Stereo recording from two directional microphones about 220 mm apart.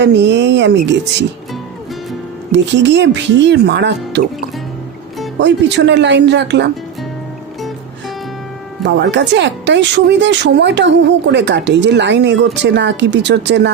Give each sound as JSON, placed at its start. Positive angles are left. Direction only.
{"t": 0.0, "sound": "speech", "side_deg": -50}
{"t": 2.5, "sound": "speech", "side_deg": -55}
{"t": 5.4, "sound": "speech", "side_deg": -50}
{"t": 8.8, "sound": "speech", "side_deg": -55}